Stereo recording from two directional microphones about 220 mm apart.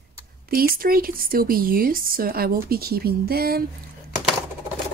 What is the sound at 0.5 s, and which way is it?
Speech, 40° right (ahead or behind).